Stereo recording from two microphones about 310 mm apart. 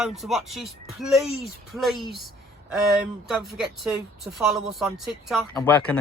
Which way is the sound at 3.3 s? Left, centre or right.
Centre.